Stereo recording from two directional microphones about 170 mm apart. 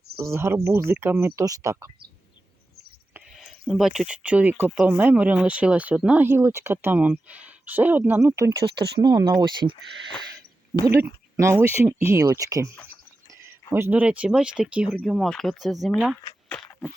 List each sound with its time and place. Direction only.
0.2 s speech: 15° right (ahead or behind)
3.3 s speech: centre (ahead or behind); by 8.5 s 15° right (ahead or behind)
8.7 s speech: 70° right (ahead or behind)
9.0 s speech: 25° right (ahead or behind)
11.0 s speech: 15° right (ahead or behind)
13.7 s speech: 10° right (ahead or behind)